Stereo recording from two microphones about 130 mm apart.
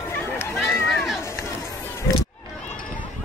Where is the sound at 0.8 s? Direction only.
Centre (ahead or behind).